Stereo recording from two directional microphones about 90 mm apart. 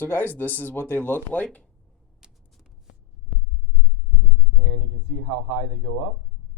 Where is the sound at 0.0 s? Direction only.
20° left (ahead or behind).